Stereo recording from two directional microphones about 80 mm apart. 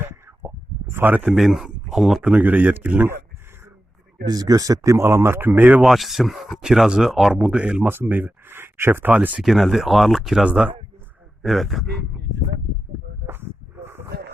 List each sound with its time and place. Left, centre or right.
0.0 s a sound: right
1.3 s speech: centre
2.3 s speech: right
4.3 s speech: right
5.0 s speech: right
5.8 s speech: centre
7.9 s speech: right
9.4 s speech: centre
10.4 s speech: centre
11.4 s speech: centre
13.2 s a sound: right